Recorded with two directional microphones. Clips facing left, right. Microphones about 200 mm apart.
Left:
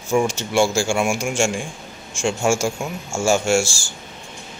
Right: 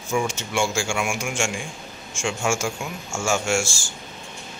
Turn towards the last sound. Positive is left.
turn(degrees=35)  # may be behind; listen again after turning